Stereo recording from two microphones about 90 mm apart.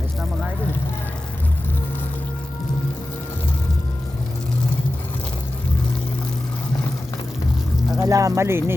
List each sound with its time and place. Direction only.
7.9 s speech: 40° right (ahead or behind)